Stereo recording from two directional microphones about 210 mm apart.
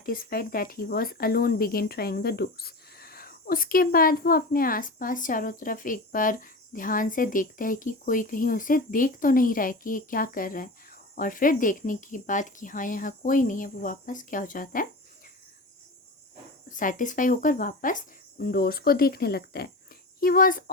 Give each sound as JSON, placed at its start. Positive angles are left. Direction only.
{"t": 0.0, "sound": "speech", "side_deg": 45}
{"t": 16.6, "sound": "speech", "side_deg": 40}